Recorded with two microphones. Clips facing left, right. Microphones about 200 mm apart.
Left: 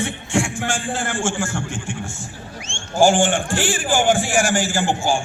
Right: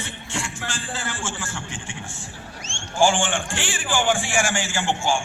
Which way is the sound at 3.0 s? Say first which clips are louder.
Left 5 dB; 40° left (ahead or behind).